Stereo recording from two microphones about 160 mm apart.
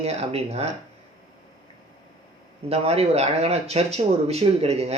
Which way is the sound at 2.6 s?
40° right (ahead or behind).